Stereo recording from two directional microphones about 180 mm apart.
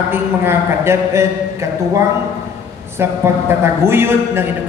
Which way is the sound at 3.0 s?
15° right (ahead or behind).